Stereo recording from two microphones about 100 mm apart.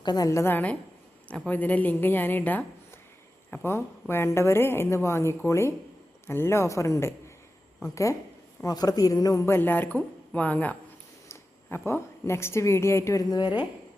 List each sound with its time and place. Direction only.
0.0 s a woman's voice: 45° left (ahead or behind)
0.3 s a woman's voice: 25° left (ahead or behind)
8.6 s a man's voice: 40° left (ahead or behind)
9.5 s a woman's voice: 20° left (ahead or behind)
11.9 s a woman's voice: 25° left (ahead or behind); by 13.7 s 45° left (ahead or behind)